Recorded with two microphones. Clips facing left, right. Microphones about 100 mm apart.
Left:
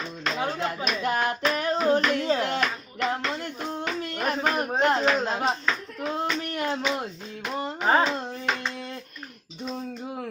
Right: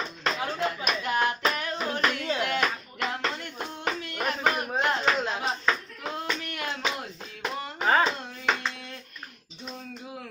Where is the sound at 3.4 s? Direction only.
35° left (ahead or behind).